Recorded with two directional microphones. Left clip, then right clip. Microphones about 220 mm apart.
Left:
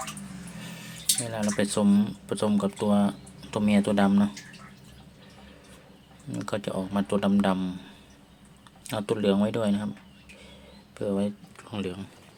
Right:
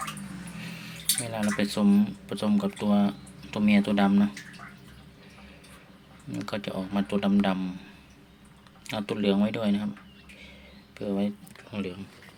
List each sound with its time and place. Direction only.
1.2 s speech: 10° left (ahead or behind)
6.3 s speech: 15° left (ahead or behind)
8.9 s speech: 15° left (ahead or behind)
10.9 s speech: 15° left (ahead or behind)